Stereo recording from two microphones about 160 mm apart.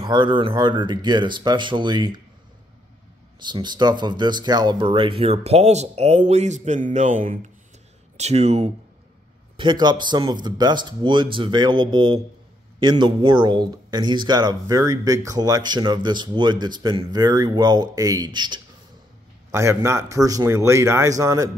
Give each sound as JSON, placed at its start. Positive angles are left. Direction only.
{"t": 0.0, "sound": "speech", "side_deg": -30}
{"t": 3.4, "sound": "speech", "side_deg": -30}
{"t": 8.2, "sound": "speech", "side_deg": -45}
{"t": 9.6, "sound": "speech", "side_deg": -30}
{"t": 19.5, "sound": "speech", "side_deg": -15}